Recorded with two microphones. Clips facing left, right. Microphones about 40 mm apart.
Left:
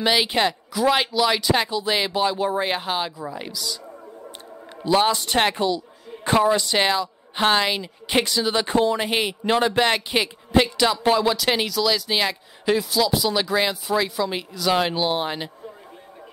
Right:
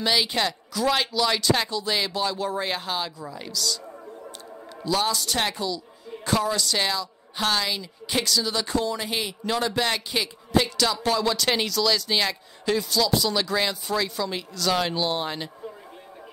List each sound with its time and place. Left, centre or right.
0.0 s a woman's voice: left
4.8 s a woman's voice: left
11.3 s speech: centre